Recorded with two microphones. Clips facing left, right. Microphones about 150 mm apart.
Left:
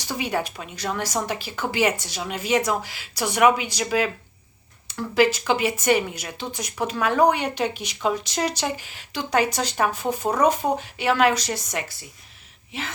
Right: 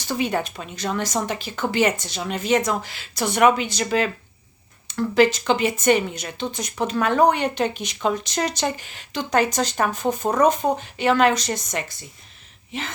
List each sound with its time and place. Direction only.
0.0 s a woman's voice: 10° left (ahead or behind)